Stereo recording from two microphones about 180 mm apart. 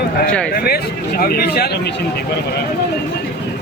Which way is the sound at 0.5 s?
60° left (ahead or behind).